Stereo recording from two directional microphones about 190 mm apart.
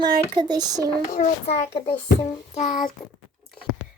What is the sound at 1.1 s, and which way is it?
Speech, 35° left (ahead or behind).